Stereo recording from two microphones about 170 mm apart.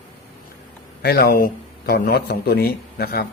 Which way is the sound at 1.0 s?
65° left (ahead or behind).